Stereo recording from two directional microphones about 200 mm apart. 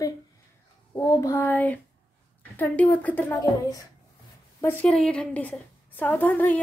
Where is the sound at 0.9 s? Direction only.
15° left (ahead or behind).